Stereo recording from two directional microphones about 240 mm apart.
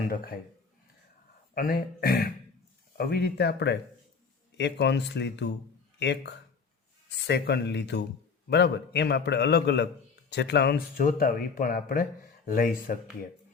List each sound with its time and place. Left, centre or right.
1.5 s a man's voice: left